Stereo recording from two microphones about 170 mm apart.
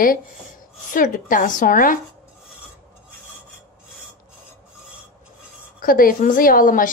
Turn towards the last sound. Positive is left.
turn(degrees=55)  # may be behind; listen again after turning